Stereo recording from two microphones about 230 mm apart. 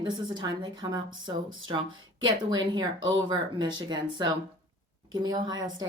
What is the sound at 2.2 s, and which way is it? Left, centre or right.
A woman's voice, centre.